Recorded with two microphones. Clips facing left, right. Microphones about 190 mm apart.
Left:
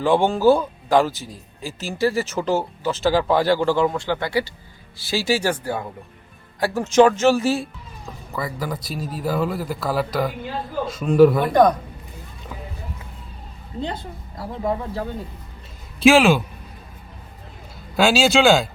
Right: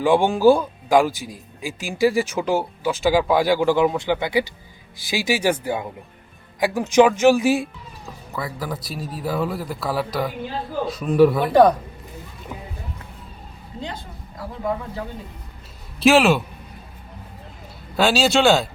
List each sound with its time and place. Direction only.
0.0 s speech: 15° right (ahead or behind)
8.3 s speech: centre (ahead or behind)
16.0 s speech: centre (ahead or behind)
17.9 s speech: centre (ahead or behind)